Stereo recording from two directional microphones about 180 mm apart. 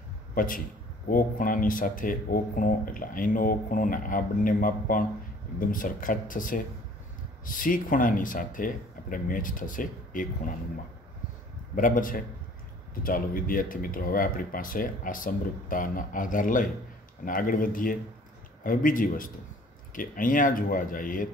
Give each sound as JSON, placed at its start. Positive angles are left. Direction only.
{"t": 0.3, "sound": "speech", "side_deg": 50}
{"t": 11.7, "sound": "speech", "side_deg": 50}